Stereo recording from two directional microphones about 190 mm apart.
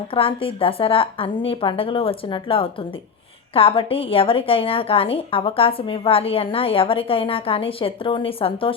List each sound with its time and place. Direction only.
0.1 s a woman's voice: 30° left (ahead or behind)